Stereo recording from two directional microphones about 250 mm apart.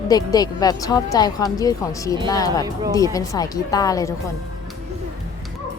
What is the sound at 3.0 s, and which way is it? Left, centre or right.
Speech, centre.